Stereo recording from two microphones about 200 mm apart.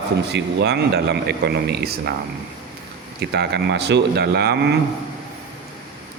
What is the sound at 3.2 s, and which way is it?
A man's voice, 55° right (ahead or behind).